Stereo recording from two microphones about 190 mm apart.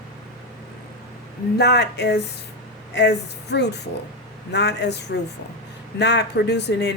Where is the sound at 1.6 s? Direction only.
60° left (ahead or behind).